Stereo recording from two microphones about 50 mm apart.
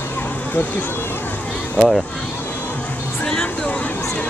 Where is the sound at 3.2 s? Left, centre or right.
Centre.